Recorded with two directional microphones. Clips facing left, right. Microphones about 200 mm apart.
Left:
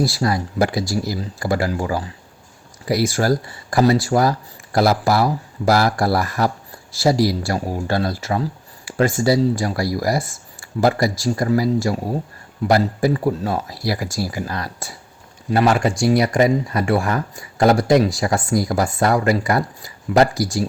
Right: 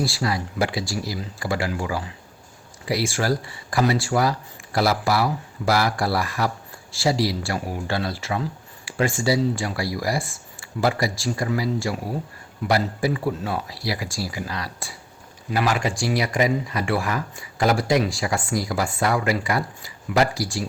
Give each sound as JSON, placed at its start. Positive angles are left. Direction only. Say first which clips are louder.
{"t": 0.0, "sound": "speech", "louder": "left 5 dB", "side_deg": 40}